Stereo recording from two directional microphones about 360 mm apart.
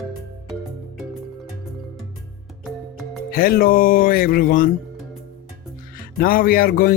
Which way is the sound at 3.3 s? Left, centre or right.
Left.